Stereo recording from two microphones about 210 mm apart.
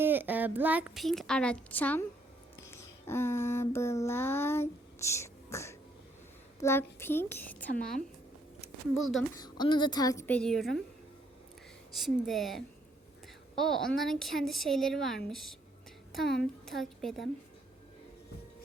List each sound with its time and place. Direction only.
0.0 s a woman's voice: 10° right (ahead or behind); by 2.0 s 5° left (ahead or behind)
2.6 s a sound: 10° left (ahead or behind)
6.6 s a child's voice: 10° left (ahead or behind)
9.3 s a woman's voice: 20° left (ahead or behind); by 10.8 s centre (ahead or behind)
11.9 s a woman's voice: centre (ahead or behind)